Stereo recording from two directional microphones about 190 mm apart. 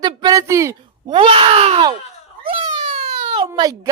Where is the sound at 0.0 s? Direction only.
20° right (ahead or behind).